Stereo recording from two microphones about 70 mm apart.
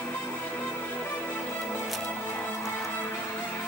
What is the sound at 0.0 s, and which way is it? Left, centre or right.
Music, left.